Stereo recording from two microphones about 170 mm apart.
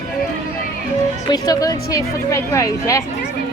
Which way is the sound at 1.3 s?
20° left (ahead or behind).